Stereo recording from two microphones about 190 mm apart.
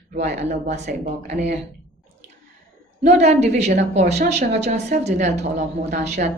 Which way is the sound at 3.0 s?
35° right (ahead or behind).